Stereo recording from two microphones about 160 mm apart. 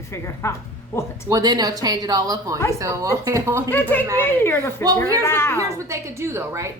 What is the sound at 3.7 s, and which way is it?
A woman's voice, 10° left (ahead or behind).